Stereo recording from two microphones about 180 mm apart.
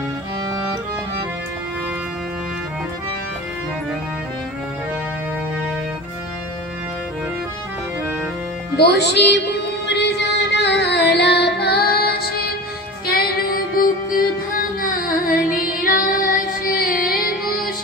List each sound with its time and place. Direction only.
8.7 s music: 70° left (ahead or behind)